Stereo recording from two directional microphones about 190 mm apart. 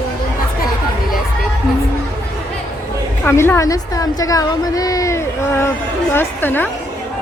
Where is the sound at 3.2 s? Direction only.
10° left (ahead or behind).